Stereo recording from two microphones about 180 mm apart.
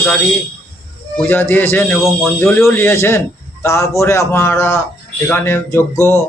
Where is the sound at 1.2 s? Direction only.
10° left (ahead or behind).